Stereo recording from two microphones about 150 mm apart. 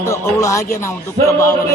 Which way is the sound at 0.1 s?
20° left (ahead or behind).